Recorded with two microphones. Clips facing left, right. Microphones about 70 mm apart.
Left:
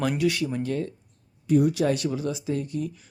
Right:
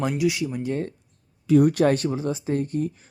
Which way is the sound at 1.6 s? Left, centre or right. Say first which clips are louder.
Right 4 dB; right.